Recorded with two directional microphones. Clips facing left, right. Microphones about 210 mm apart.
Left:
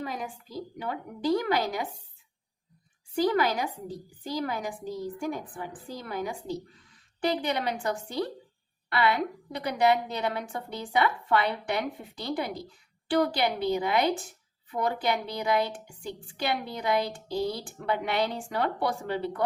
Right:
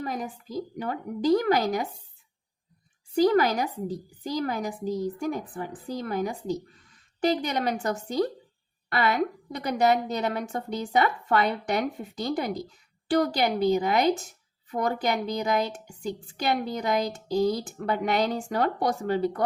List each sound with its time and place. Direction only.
0.0 s a woman's voice: 45° right (ahead or behind)
3.2 s a woman's voice: 40° right (ahead or behind)